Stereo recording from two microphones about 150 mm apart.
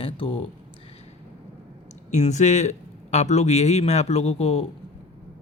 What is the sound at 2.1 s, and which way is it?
A man's voice, 50° left (ahead or behind).